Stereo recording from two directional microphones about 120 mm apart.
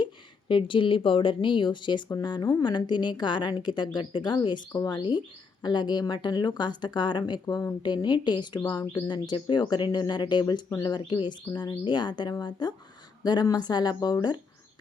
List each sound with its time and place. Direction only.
0.0 s speech: 45° left (ahead or behind)